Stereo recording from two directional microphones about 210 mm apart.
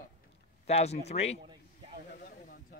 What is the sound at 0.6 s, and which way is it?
Speech, 30° left (ahead or behind).